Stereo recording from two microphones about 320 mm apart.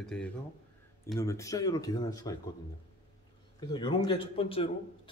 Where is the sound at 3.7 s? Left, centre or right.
Centre.